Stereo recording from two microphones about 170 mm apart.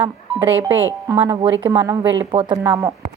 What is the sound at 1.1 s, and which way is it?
A woman's voice, 30° right (ahead or behind).